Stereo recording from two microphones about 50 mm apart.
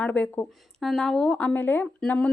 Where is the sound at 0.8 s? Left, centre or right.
Centre.